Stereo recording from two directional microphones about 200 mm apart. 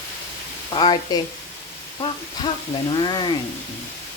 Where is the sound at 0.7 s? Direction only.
25° left (ahead or behind).